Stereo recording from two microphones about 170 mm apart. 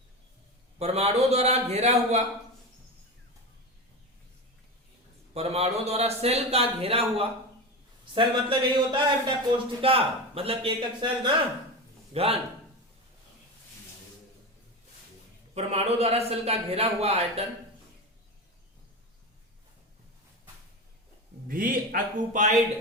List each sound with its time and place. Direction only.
0.8 s a man's voice: 40° right (ahead or behind)
5.3 s a man's voice: 35° right (ahead or behind)
15.5 s a man's voice: 35° right (ahead or behind)
21.4 s a man's voice: 55° right (ahead or behind)